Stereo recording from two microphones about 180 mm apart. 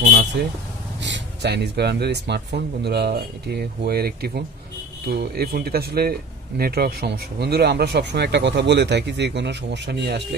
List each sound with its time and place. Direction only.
0.1 s speech: 65° right (ahead or behind)